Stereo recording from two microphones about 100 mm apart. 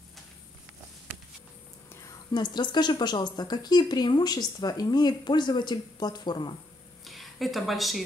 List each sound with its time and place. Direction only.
2.3 s speech: 45° left (ahead or behind)
7.1 s speech: centre (ahead or behind)